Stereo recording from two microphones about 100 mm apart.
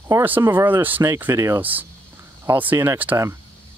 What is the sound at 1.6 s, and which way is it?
Speech, 15° right (ahead or behind).